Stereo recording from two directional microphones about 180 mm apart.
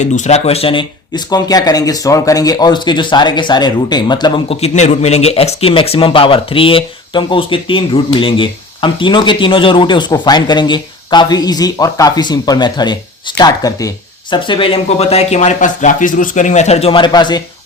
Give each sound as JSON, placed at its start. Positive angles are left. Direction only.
{"t": 0.0, "sound": "speech", "side_deg": 40}